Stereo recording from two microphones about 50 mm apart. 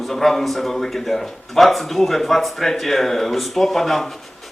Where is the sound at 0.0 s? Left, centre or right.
Centre.